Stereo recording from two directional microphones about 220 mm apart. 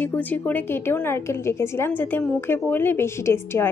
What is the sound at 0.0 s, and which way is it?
A woman's voice, 10° left (ahead or behind).